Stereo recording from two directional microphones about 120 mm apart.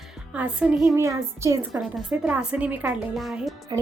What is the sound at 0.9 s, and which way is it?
Speech, 25° right (ahead or behind).